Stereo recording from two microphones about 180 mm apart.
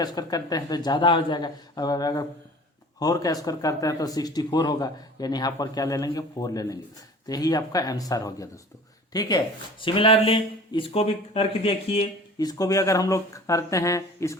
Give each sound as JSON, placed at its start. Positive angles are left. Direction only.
{"t": 0.0, "sound": "speech", "side_deg": 20}
{"t": 12.4, "sound": "speech", "side_deg": 20}